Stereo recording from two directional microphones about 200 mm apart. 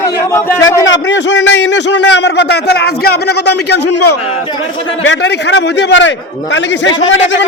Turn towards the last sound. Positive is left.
turn(degrees=70)  # may be behind; listen again after turning